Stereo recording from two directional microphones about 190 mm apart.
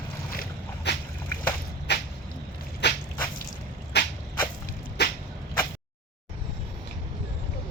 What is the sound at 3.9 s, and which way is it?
Vehicle, 60° left (ahead or behind).